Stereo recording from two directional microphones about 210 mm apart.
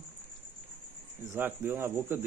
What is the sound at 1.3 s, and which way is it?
Speech, 10° right (ahead or behind).